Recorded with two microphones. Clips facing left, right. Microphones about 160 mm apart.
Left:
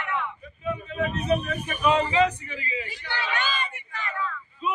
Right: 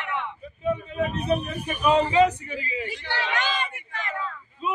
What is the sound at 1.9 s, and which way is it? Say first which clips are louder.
Speech: right 6 dB; 40° right (ahead or behind).